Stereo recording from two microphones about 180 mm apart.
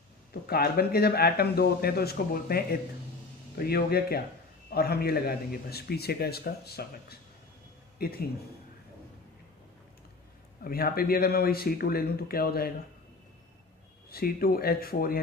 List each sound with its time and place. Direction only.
0.3 s speech: 60° left (ahead or behind)
10.6 s speech: 55° left (ahead or behind)
14.1 s speech: 55° left (ahead or behind)